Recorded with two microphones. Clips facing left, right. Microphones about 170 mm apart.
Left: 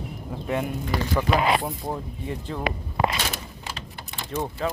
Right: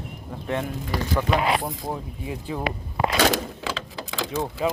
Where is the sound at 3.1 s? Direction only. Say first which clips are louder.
Right 10 dB; 85° right.